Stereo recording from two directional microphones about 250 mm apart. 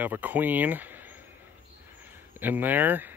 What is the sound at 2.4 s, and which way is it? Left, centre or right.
Speech, centre.